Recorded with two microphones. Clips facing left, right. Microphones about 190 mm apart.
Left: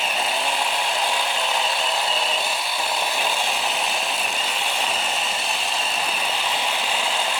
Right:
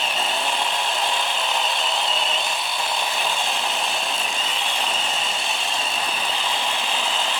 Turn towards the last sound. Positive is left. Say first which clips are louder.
# left 1 dB
turn(degrees=5)  # may be behind; listen again after turning